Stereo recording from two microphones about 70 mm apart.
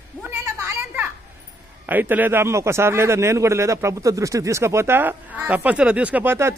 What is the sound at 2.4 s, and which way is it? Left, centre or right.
A man's voice, right.